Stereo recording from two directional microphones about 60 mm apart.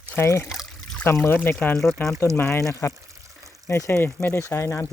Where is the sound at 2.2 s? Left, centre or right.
Left.